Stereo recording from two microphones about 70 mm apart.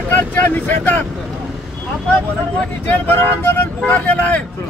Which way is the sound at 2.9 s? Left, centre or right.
Left.